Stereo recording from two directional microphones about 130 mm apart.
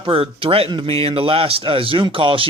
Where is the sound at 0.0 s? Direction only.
45° right (ahead or behind).